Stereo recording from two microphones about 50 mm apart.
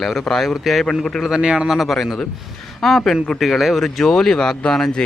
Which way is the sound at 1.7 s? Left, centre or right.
Centre.